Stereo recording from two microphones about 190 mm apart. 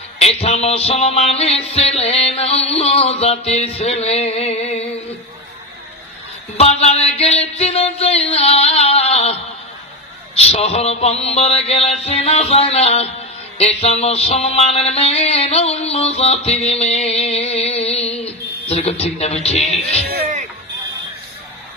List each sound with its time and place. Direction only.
0.2 s music: 30° left (ahead or behind)
6.5 s music: 35° left (ahead or behind)
18.2 s a man's voice: 35° left (ahead or behind)